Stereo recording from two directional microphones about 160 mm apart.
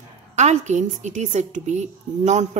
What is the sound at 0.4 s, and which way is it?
A woman's voice, 45° right (ahead or behind).